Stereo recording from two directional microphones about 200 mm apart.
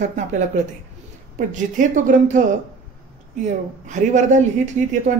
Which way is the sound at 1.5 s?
40° right (ahead or behind).